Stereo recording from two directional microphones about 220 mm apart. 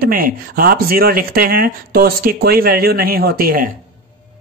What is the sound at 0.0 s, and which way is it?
Speech, 40° right (ahead or behind).